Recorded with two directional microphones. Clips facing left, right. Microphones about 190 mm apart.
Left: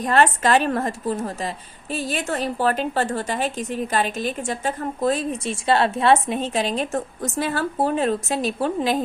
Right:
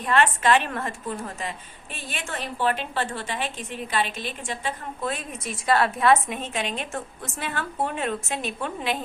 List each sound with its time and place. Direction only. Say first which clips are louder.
0.0 s a woman's voice: left 3 dB; 40° left (ahead or behind)